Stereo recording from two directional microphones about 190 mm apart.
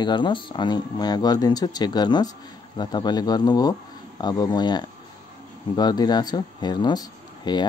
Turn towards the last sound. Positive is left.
turn(degrees=20)  # may be behind; listen again after turning